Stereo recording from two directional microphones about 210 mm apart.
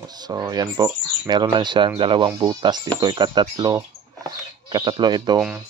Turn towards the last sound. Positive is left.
turn(degrees=-20)  # may be behind; listen again after turning